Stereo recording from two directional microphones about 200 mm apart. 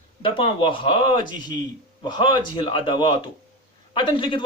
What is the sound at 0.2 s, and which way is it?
A man's voice, 25° left (ahead or behind).